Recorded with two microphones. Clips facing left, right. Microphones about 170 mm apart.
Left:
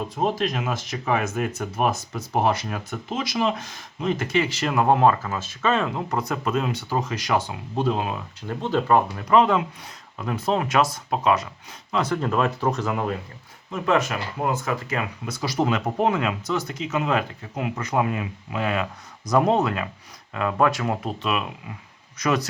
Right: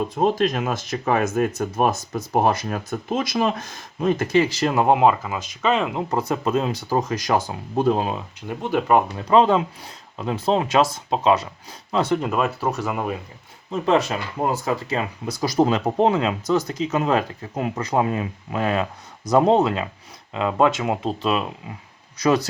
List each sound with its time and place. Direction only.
0.2 s speech: 50° right (ahead or behind); by 4.9 s 25° right (ahead or behind)
4.9 s speech: 10° right (ahead or behind)
6.1 s speech: 30° right (ahead or behind); by 8.0 s 45° right (ahead or behind)
8.4 s speech: 10° right (ahead or behind)
9.2 s speech: 30° right (ahead or behind)
12.2 s speech: 10° right (ahead or behind)
13.7 s speech: 30° right (ahead or behind)
21.1 s speech: 30° right (ahead or behind)